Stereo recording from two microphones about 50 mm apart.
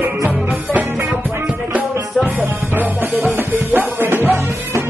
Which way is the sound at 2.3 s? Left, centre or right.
Right.